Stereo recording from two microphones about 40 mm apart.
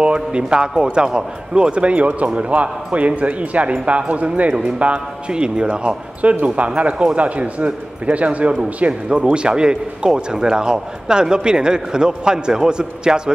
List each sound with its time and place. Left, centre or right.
0.0 s a man's voice: right
5.3 s a man's voice: right
9.1 s a man's voice: right